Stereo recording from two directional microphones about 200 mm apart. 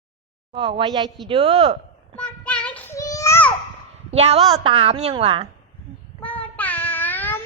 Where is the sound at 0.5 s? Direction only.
25° right (ahead or behind).